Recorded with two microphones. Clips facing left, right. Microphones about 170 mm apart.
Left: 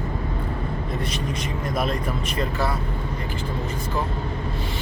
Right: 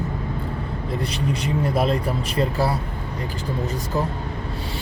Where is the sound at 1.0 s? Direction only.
30° right (ahead or behind).